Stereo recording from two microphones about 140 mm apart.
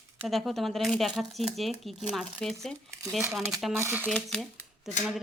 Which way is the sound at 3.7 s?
15° right (ahead or behind).